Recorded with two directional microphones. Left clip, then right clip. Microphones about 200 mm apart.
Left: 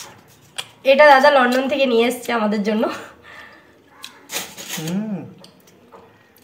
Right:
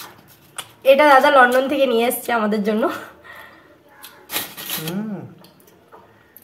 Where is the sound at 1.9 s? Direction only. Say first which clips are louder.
Left 1 dB; centre (ahead or behind).